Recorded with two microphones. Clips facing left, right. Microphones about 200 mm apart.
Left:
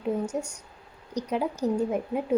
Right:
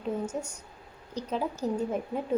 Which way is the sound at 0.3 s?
5° right (ahead or behind).